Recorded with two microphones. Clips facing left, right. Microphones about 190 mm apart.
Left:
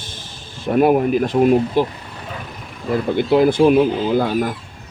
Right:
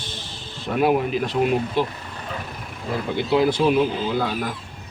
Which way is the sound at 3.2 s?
50° left (ahead or behind).